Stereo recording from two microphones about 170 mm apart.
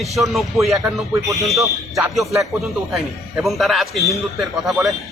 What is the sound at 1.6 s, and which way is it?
Speech, 20° right (ahead or behind).